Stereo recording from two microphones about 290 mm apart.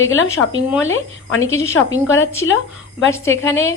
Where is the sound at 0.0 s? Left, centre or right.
Left.